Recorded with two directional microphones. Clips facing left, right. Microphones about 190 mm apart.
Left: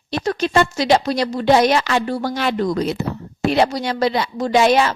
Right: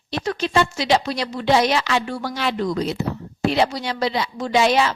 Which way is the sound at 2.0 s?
40° left (ahead or behind).